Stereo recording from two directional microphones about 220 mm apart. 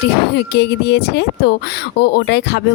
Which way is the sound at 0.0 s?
50° left (ahead or behind).